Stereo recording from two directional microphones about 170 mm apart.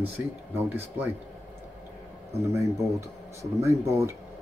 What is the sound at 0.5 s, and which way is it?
Speech, 15° right (ahead or behind).